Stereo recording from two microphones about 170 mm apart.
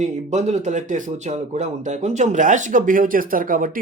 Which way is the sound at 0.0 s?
40° right (ahead or behind).